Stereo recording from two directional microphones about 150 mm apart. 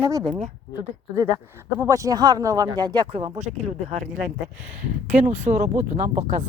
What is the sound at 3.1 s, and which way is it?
Speech, 40° right (ahead or behind).